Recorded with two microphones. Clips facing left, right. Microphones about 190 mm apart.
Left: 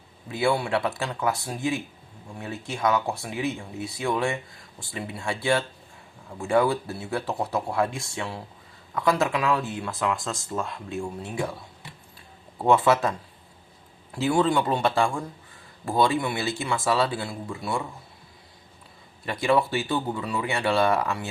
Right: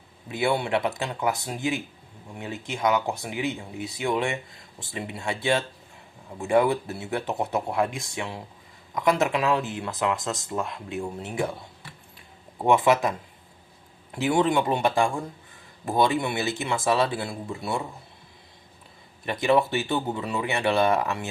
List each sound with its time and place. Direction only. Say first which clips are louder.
0.3 s speech: even; 20° right (ahead or behind)
12.5 s speech: even; 15° right (ahead or behind)
14.2 s speech: even; 20° right (ahead or behind)
19.2 s speech: right 1 dB; 20° right (ahead or behind)